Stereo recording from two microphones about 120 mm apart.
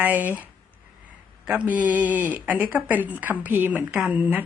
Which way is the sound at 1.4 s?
10° right (ahead or behind).